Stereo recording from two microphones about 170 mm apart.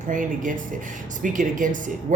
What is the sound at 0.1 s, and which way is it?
Speech, 50° right (ahead or behind).